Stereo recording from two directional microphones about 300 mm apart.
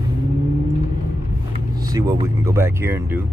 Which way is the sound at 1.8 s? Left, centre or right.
Centre.